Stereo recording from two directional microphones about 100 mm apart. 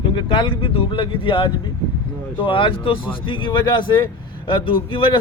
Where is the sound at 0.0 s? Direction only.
55° left (ahead or behind).